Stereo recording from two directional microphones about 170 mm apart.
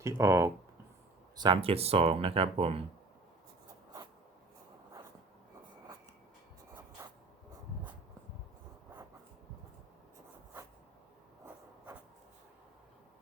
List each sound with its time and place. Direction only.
0.0 s speech: 15° right (ahead or behind)
1.4 s speech: 30° right (ahead or behind)
7.0 s a sound: 15° right (ahead or behind)